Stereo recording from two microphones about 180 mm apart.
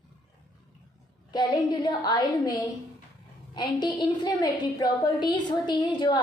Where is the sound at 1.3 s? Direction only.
25° left (ahead or behind).